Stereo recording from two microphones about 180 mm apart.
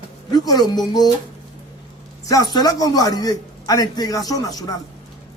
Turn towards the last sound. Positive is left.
turn(degrees=20)  # may be behind; listen again after turning